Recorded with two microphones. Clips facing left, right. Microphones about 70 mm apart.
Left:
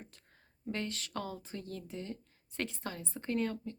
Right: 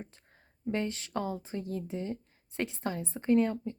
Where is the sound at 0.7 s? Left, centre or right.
Right.